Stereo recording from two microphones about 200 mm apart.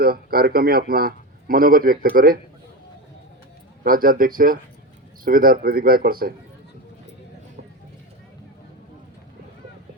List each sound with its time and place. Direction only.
0.0 s a man's voice: 50° right (ahead or behind)
3.8 s a man's voice: 45° right (ahead or behind)